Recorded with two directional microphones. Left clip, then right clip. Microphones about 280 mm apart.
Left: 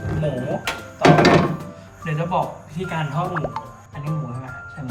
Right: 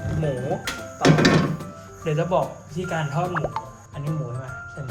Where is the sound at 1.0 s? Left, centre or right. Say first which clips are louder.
Left 5 dB; centre.